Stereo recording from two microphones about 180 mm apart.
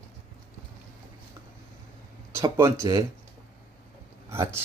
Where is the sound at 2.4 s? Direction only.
15° right (ahead or behind).